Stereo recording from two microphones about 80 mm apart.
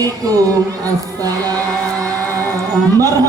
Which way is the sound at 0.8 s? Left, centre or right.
Right.